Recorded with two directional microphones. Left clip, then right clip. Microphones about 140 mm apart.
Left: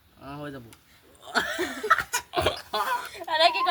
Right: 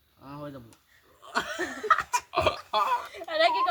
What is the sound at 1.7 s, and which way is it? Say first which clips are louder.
Laughter: even; 15° right (ahead or behind).